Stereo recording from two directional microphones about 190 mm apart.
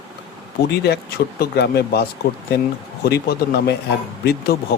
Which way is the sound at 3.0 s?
55° left (ahead or behind).